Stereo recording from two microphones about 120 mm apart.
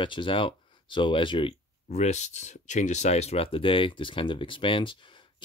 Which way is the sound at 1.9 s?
65° left (ahead or behind).